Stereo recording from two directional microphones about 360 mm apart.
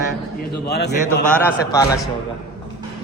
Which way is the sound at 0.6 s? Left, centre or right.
Left.